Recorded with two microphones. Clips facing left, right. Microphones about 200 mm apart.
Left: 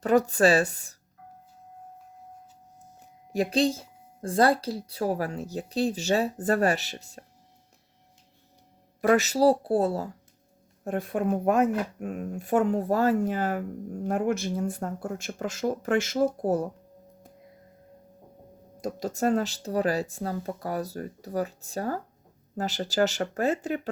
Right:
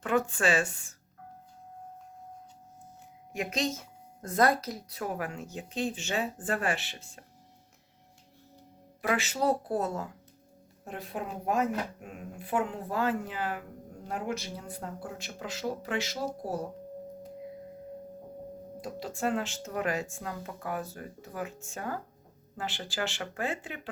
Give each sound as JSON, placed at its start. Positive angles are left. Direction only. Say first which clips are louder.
{"t": 0.0, "sound": "speech", "louder": "left 7 dB", "side_deg": 40}
{"t": 3.3, "sound": "speech", "louder": "left 8 dB", "side_deg": 35}
{"t": 9.0, "sound": "speech", "louder": "left 8 dB", "side_deg": 40}
{"t": 10.8, "sound": "speech", "louder": "left 10 dB", "side_deg": 50}
{"t": 18.8, "sound": "speech", "louder": "left 6 dB", "side_deg": 45}